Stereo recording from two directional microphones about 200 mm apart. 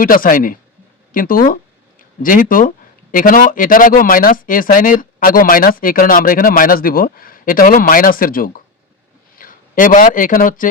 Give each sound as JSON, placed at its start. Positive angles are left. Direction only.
{"t": 0.0, "sound": "speech", "side_deg": 45}